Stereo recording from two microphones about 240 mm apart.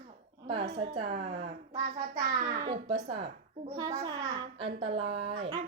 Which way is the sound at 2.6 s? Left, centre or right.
Right.